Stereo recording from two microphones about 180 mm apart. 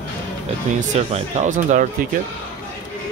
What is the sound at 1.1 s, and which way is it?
Speech, 35° right (ahead or behind).